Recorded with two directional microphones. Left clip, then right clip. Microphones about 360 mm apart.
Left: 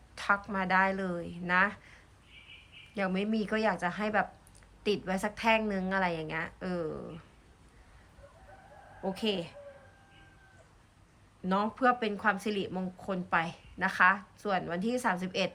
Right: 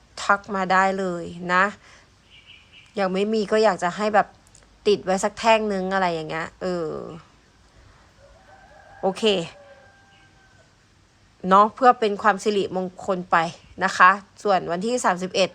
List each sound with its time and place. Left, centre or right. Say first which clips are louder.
0.2 s a woman's voice: right 8 dB; centre
9.2 s a woman's voice: right 12 dB; centre
11.4 s a woman's voice: right 13 dB; centre